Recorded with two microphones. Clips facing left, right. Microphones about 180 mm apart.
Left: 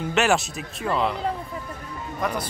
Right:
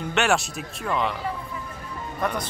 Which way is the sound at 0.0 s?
Centre (ahead or behind).